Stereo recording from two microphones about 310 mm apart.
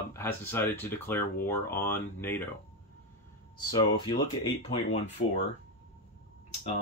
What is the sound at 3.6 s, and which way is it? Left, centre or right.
Speech, centre.